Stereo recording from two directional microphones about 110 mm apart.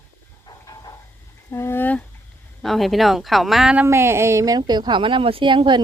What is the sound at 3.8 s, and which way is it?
Speech, 20° right (ahead or behind).